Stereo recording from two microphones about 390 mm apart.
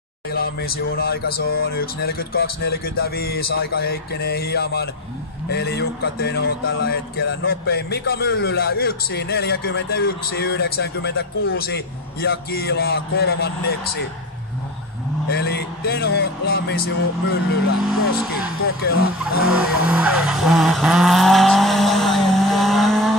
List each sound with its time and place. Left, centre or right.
0.3 s speech: left
15.2 s speech: left
18.8 s speech: left
19.4 s vehicle: centre